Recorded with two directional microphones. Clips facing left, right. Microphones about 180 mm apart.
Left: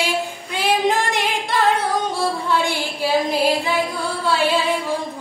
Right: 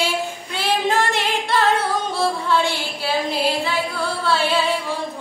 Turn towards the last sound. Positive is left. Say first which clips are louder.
# left 1 dB
turn(degrees=10)  # may be behind; listen again after turning